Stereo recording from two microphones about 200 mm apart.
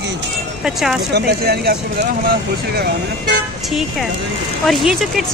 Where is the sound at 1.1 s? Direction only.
55° right (ahead or behind).